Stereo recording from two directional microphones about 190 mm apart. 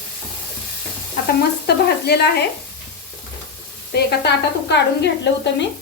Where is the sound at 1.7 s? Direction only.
60° left (ahead or behind).